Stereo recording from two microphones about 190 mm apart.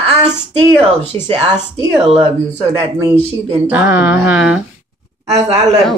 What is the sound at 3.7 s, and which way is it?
Speech, 5° right (ahead or behind).